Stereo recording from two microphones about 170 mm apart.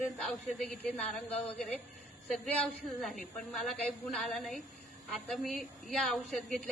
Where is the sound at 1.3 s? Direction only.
35° left (ahead or behind).